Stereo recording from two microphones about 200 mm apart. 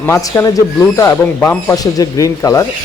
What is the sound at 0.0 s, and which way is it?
Speech, 10° left (ahead or behind).